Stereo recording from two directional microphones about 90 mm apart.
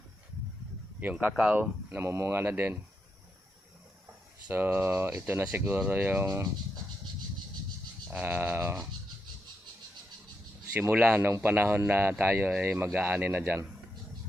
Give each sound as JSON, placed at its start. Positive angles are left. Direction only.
{"t": 0.9, "sound": "speech", "side_deg": -15}
{"t": 1.9, "sound": "speech", "side_deg": -30}
{"t": 4.5, "sound": "speech", "side_deg": -25}
{"t": 6.2, "sound": "speech", "side_deg": -40}
{"t": 8.1, "sound": "speech", "side_deg": -20}
{"t": 10.9, "sound": "speech", "side_deg": -20}